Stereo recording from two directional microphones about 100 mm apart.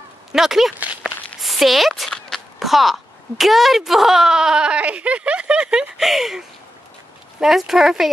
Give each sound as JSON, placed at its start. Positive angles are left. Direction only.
{"t": 0.3, "sound": "speech", "side_deg": -5}
{"t": 0.7, "sound": "walk", "side_deg": -15}
{"t": 1.4, "sound": "speech", "side_deg": 0}